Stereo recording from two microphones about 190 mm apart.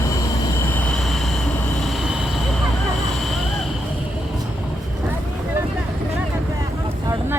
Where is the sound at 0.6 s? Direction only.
10° left (ahead or behind).